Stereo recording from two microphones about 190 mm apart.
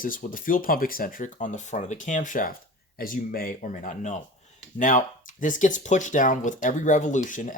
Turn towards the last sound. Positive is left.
turn(degrees=45)  # may be behind; listen again after turning